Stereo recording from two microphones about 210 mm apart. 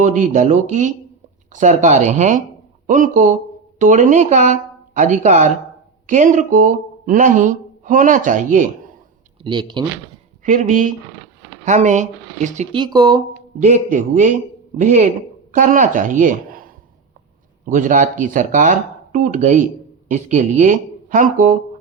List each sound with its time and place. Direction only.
0.0 s speech: 35° right (ahead or behind)
9.4 s speech: 20° right (ahead or behind)
10.4 s speech: 40° right (ahead or behind)
12.7 s speech: 20° right (ahead or behind)
13.6 s a woman's voice: 35° right (ahead or behind)